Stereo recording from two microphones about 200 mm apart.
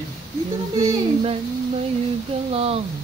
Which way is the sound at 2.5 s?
30° right (ahead or behind).